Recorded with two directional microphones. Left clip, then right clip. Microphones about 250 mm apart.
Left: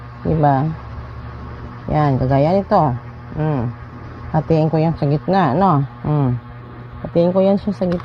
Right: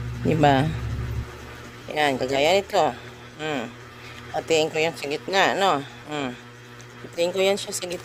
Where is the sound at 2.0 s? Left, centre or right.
Right.